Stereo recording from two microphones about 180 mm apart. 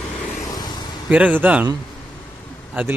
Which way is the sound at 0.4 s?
20° left (ahead or behind).